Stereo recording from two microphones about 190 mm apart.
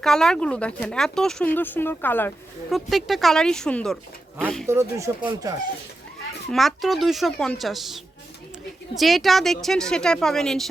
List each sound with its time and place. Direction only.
0.0 s speech: 5° left (ahead or behind)
2.6 s speech: centre (ahead or behind)
4.7 s speech: 15° right (ahead or behind)
6.5 s speech: centre (ahead or behind)